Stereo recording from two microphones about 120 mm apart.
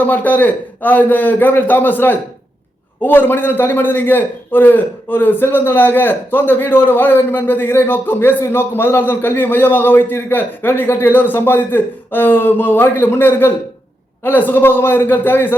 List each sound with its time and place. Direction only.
0.0 s a man's voice: 15° left (ahead or behind)